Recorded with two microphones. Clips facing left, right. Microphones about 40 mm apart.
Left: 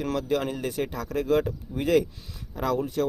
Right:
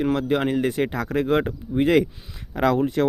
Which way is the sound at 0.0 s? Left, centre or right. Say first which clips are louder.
Right 5 dB; right.